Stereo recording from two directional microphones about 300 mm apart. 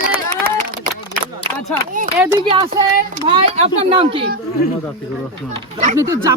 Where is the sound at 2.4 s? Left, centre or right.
Centre.